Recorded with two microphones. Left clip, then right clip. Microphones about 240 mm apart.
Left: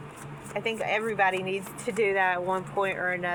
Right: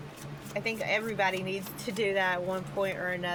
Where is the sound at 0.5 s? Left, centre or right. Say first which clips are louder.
Left 2 dB; centre.